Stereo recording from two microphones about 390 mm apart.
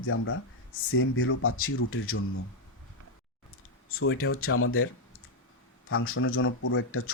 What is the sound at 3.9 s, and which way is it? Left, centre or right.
Speech, left.